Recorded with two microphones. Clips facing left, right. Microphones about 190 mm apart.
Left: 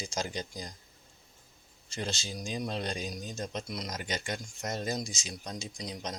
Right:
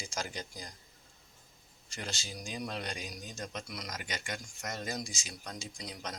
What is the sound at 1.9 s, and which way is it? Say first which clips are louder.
Speech: left 5 dB; 25° left (ahead or behind).